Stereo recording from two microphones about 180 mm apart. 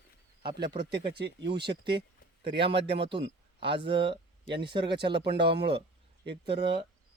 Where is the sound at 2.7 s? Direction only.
30° right (ahead or behind).